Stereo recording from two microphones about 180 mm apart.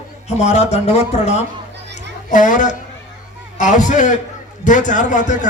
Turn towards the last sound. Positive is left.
turn(degrees=45)  # may be behind; listen again after turning